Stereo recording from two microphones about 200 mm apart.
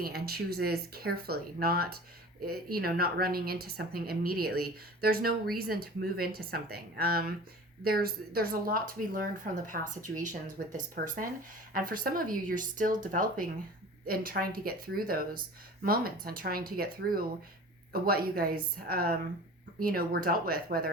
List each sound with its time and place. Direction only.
0.0 s a woman's voice: 50° right (ahead or behind)